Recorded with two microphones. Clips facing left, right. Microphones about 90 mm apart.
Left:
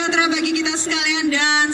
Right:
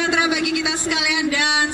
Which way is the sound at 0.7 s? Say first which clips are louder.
Even; 90° left.